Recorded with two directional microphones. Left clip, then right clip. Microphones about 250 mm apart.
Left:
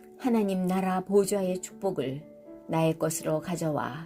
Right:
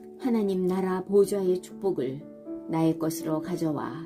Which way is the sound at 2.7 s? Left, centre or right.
Left.